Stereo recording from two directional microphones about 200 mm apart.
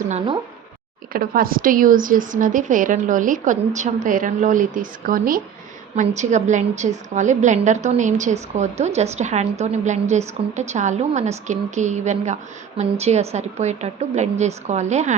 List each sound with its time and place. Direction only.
1.1 s a woman's voice: 45° right (ahead or behind)